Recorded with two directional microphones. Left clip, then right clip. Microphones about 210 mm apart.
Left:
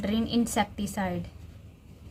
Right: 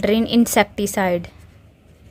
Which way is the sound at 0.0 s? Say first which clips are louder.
Right 11 dB; 45° right (ahead or behind).